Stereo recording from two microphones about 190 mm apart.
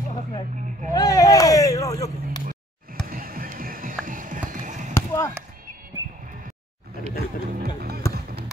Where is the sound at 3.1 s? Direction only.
50° right (ahead or behind).